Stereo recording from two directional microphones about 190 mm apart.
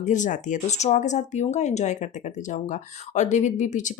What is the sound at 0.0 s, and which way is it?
Speech, 40° left (ahead or behind).